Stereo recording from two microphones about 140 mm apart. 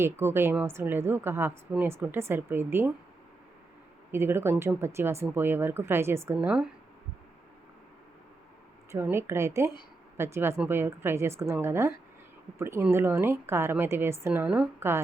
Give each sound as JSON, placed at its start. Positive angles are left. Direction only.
{"t": 0.0, "sound": "speech", "side_deg": -15}
{"t": 4.1, "sound": "speech", "side_deg": -15}
{"t": 8.9, "sound": "a woman's voice", "side_deg": -15}